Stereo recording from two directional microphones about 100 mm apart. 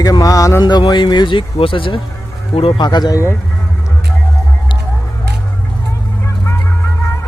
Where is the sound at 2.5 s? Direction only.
75° left (ahead or behind).